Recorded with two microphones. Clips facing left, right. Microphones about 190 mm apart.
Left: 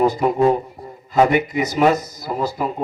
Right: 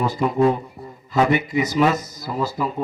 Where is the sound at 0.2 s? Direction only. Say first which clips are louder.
Left 2 dB; 40° left (ahead or behind).